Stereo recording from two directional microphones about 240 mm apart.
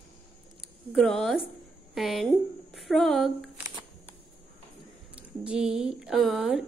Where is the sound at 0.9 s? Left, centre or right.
Centre.